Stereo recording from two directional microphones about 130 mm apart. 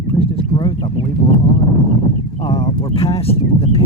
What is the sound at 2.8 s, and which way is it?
Speech, 50° left (ahead or behind).